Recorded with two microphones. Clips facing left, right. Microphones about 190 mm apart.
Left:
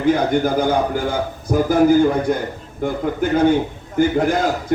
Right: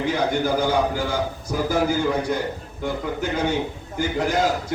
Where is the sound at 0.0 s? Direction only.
50° left (ahead or behind).